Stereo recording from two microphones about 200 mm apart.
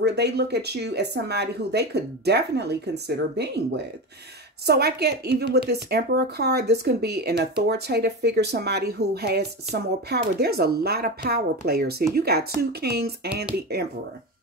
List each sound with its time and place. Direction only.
0.0 s a woman's voice: 55° right (ahead or behind)